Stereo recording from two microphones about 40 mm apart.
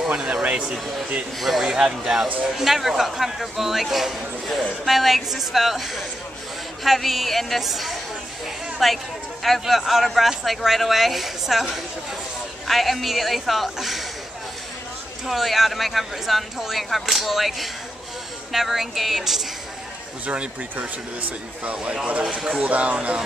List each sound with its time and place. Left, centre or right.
0.1 s speech: right
1.4 s speech: centre
1.7 s a man's voice: centre
15.2 s a man's voice: centre
22.3 s a man's voice: centre
22.6 s speech: right